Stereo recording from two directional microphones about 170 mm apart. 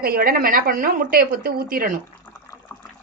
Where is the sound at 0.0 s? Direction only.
60° right (ahead or behind).